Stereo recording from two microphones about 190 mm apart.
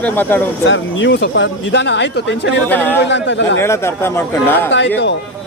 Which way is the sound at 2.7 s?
10° left (ahead or behind).